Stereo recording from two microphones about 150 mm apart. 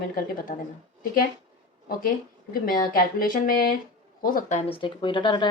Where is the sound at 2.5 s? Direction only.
70° left (ahead or behind).